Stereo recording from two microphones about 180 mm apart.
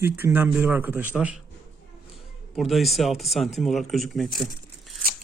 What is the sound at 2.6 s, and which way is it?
Speech, centre (ahead or behind).